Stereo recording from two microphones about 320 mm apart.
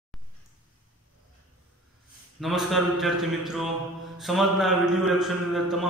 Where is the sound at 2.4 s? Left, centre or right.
Centre.